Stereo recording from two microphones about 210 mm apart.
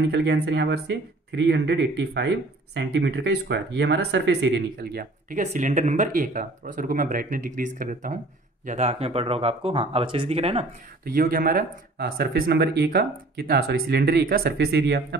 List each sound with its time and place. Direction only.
0.1 s speech: 55° right (ahead or behind); by 10.7 s 30° right (ahead or behind)
11.1 s speech: 45° right (ahead or behind)